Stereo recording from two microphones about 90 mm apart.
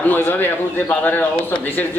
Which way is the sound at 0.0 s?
20° left (ahead or behind).